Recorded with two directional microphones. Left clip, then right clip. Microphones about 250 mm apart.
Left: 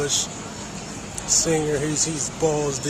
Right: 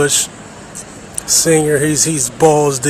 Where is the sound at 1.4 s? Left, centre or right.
Right.